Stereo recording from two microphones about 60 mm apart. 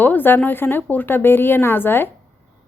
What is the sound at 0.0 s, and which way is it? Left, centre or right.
A woman's voice, left.